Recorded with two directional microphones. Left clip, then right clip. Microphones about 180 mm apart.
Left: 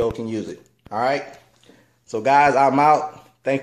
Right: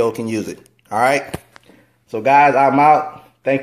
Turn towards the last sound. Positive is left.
turn(degrees=0)  # may be behind; listen again after turning